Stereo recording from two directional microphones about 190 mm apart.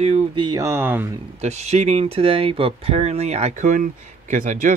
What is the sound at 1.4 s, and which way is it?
Speech, 35° right (ahead or behind).